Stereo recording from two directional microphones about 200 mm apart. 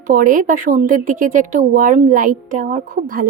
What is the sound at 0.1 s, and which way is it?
Speech, 45° right (ahead or behind).